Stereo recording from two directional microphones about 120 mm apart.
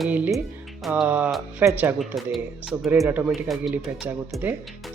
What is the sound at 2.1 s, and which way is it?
Speech, centre (ahead or behind).